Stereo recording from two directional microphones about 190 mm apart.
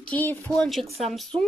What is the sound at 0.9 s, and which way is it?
Speech, 35° right (ahead or behind).